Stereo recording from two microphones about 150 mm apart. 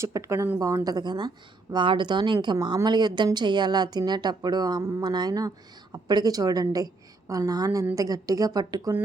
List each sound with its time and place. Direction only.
0.0 s speech: 20° right (ahead or behind)